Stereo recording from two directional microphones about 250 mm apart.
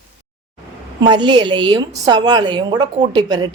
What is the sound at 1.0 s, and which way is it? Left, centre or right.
A woman's voice, centre.